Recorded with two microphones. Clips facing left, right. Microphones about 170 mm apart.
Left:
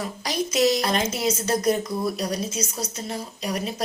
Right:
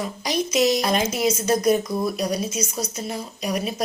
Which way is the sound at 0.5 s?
10° right (ahead or behind).